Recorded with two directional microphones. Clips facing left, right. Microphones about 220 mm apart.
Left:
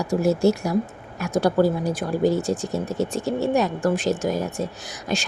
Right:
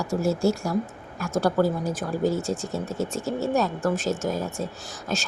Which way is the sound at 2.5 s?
35° left (ahead or behind).